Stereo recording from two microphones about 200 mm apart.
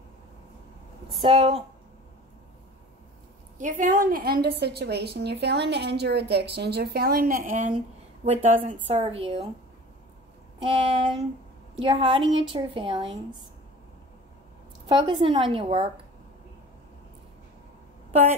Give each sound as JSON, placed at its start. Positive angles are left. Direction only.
{"t": 1.1, "sound": "a woman's voice", "side_deg": -25}
{"t": 3.5, "sound": "a woman's voice", "side_deg": -40}
{"t": 10.6, "sound": "a woman's voice", "side_deg": -30}
{"t": 14.9, "sound": "a woman's voice", "side_deg": -25}